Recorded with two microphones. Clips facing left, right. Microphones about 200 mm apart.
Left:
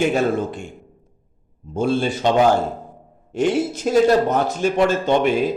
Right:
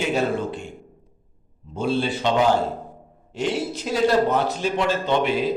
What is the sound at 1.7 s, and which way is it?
Speech, 50° left (ahead or behind).